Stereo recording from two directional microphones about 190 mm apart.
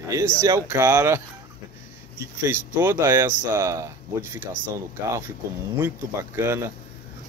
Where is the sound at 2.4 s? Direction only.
10° right (ahead or behind).